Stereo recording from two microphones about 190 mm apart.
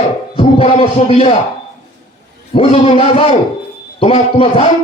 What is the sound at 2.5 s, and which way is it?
A man's voice, 30° left (ahead or behind).